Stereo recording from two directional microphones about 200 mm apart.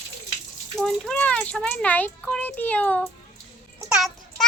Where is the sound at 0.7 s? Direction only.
5° left (ahead or behind).